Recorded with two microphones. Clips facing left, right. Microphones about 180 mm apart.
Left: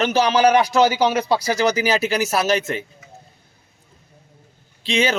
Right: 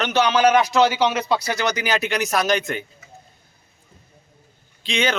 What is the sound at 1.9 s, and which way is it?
Speech, 5° left (ahead or behind).